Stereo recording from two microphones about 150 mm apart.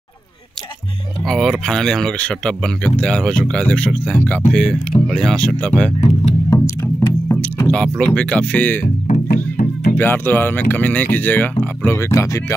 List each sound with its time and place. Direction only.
1.2 s speech: centre (ahead or behind)
6.5 s music: 20° left (ahead or behind)
8.8 s music: 55° left (ahead or behind)
9.3 s music: 70° left (ahead or behind)
9.9 s speech: 15° left (ahead or behind)